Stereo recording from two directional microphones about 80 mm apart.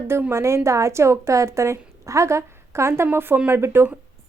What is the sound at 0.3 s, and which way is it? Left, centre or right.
A woman's voice, right.